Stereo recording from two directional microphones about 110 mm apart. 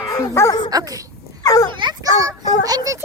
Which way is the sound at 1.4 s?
35° left (ahead or behind).